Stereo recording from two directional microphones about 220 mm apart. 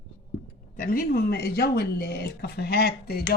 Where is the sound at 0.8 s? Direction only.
40° left (ahead or behind).